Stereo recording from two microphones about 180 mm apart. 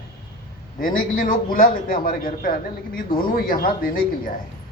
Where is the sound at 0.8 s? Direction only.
50° left (ahead or behind).